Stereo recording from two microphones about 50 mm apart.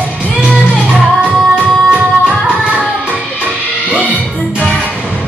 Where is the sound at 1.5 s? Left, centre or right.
Right.